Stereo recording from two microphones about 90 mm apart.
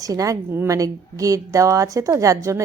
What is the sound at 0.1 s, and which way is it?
A woman's voice, 40° right (ahead or behind).